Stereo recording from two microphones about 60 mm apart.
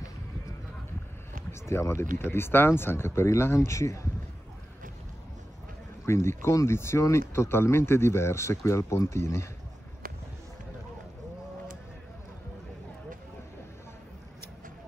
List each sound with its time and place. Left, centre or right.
1.5 s speech: left
2.3 s speech: left
6.0 s speech: left